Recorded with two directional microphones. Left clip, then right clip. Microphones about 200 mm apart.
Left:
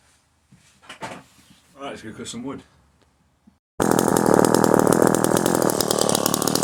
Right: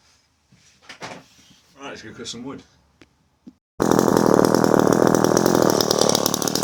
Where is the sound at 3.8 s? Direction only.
45° left (ahead or behind).